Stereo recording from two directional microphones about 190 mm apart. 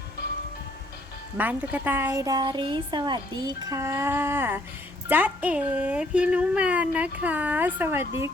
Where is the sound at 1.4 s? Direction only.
10° right (ahead or behind).